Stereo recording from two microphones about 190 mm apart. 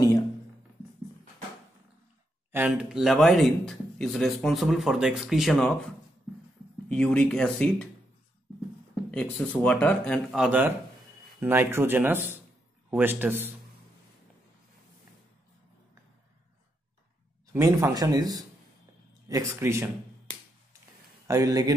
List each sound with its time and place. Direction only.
2.5 s speech: 5° right (ahead or behind)
6.9 s speech: 5° left (ahead or behind)
9.1 s speech: 5° left (ahead or behind); by 13.5 s 10° right (ahead or behind)
17.5 s speech: 15° right (ahead or behind)
21.3 s speech: 20° right (ahead or behind)